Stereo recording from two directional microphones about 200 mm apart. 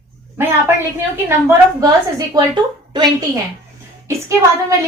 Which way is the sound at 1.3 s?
10° right (ahead or behind).